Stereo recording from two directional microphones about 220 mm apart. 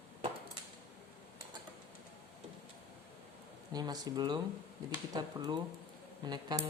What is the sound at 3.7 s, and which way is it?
Speech, 20° right (ahead or behind).